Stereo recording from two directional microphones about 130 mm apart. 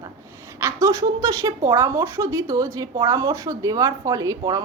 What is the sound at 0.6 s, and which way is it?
Speech, 25° right (ahead or behind).